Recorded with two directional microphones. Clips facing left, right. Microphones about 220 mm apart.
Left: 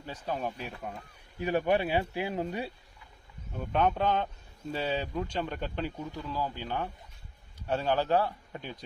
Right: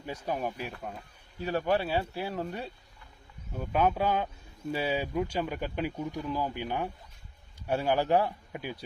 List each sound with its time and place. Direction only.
0.0 s speech: 10° right (ahead or behind)
1.4 s speech: 15° left (ahead or behind)
3.6 s speech: 5° right (ahead or behind)